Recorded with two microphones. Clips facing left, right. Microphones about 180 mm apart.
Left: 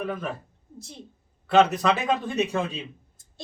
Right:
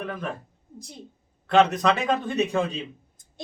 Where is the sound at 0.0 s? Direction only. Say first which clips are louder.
Left 1 dB; 5° left (ahead or behind).